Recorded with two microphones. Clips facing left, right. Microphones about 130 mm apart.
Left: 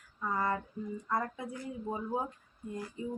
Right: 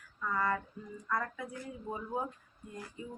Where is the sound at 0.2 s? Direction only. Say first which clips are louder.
Left 1 dB; 25° left (ahead or behind).